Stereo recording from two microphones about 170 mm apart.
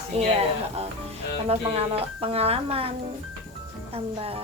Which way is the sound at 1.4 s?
35° right (ahead or behind).